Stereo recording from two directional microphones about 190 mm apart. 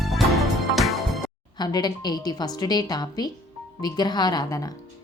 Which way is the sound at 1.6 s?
20° left (ahead or behind).